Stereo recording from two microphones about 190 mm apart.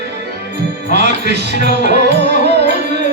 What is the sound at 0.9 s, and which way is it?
Music, 65° right (ahead or behind).